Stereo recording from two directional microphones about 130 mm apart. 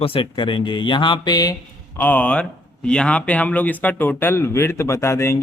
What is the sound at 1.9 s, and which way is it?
Speech, 15° left (ahead or behind).